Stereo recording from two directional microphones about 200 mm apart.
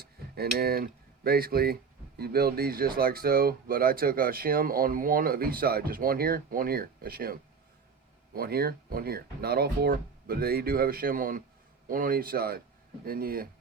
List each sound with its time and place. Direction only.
0.0 s speech: 50° right (ahead or behind)